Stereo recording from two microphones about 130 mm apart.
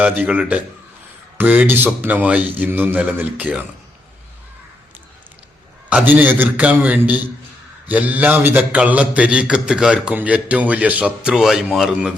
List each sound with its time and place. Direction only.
0.0 s a man's voice: 10° right (ahead or behind)
5.9 s a man's voice: 15° right (ahead or behind)